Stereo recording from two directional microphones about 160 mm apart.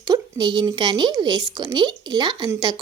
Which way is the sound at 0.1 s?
25° right (ahead or behind).